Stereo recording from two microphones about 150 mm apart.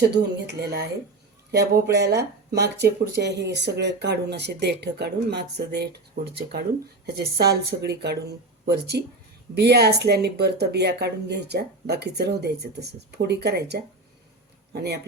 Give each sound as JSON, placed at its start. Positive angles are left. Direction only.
{"t": 0.1, "sound": "a man's voice", "side_deg": -90}